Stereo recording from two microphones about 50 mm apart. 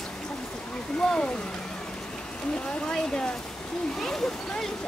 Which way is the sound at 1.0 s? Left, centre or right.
Centre.